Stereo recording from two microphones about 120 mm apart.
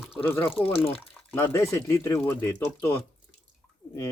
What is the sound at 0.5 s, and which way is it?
Speech, 50° left (ahead or behind).